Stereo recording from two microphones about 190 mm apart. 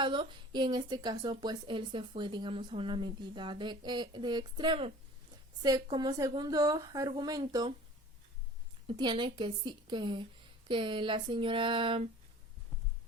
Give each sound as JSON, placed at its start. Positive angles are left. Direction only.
{"t": 0.0, "sound": "a woman's voice", "side_deg": -25}
{"t": 8.9, "sound": "a woman's voice", "side_deg": -25}